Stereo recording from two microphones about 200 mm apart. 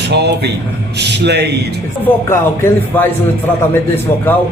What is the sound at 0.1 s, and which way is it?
Speech, 55° right (ahead or behind).